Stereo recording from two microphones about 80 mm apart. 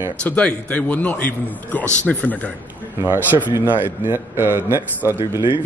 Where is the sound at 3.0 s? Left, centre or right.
Right.